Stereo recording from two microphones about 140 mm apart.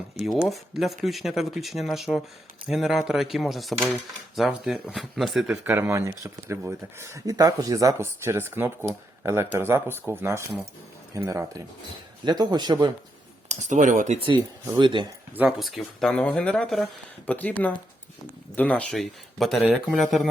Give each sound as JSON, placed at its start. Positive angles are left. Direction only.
{"t": 0.4, "sound": "speech", "side_deg": 0}
{"t": 5.6, "sound": "speech", "side_deg": -15}
{"t": 13.5, "sound": "speech", "side_deg": -60}
{"t": 14.2, "sound": "speech", "side_deg": -35}
{"t": 15.4, "sound": "speech", "side_deg": -5}